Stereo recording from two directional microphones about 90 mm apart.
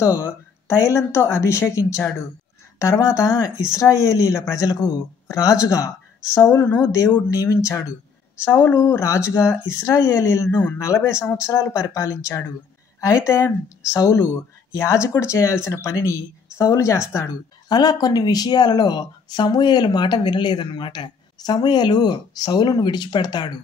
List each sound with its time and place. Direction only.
0.0 s a woman's voice: 30° left (ahead or behind)
6.5 s a woman's voice: 20° left (ahead or behind)
6.8 s speech: 35° left (ahead or behind)
8.5 s a woman's voice: 25° left (ahead or behind)
10.5 s speech: 15° left (ahead or behind)
10.8 s speech: 30° left (ahead or behind)
17.6 s speech: 50° left (ahead or behind)